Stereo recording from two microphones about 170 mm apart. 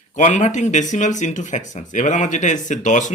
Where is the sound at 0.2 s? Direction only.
45° left (ahead or behind).